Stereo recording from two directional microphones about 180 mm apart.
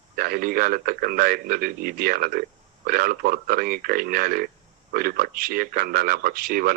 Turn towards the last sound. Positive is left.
turn(degrees=-55)  # may be behind; listen again after turning